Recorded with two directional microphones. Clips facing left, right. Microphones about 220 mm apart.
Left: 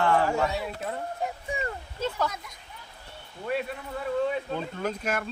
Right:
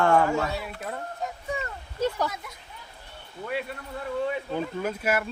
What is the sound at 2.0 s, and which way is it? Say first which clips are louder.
Speech: right 3 dB; 15° right (ahead or behind).